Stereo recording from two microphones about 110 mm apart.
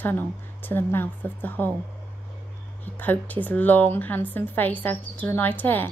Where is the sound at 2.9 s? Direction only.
15° left (ahead or behind).